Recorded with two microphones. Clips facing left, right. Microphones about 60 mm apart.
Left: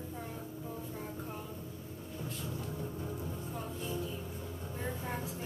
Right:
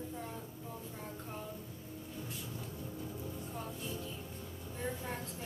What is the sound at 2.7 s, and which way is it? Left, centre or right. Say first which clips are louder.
Music: left 4 dB; left.